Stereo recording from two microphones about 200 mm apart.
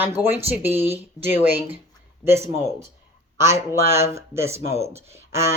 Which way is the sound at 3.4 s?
15° right (ahead or behind).